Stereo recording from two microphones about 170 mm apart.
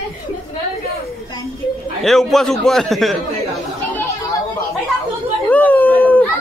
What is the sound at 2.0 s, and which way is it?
A man's voice, centre (ahead or behind).